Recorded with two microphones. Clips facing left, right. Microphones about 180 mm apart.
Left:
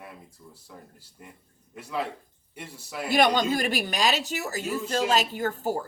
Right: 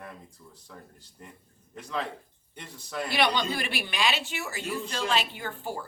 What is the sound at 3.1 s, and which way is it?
Speech, 45° left (ahead or behind).